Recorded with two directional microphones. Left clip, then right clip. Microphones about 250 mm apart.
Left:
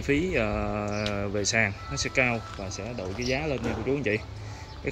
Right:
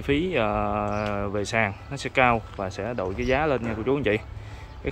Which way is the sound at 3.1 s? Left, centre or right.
Right.